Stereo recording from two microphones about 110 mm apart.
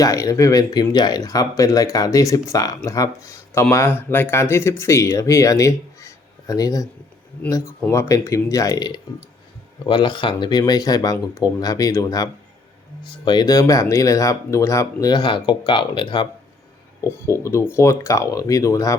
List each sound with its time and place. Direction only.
0.0 s speech: 35° left (ahead or behind)
17.0 s speech: 25° left (ahead or behind)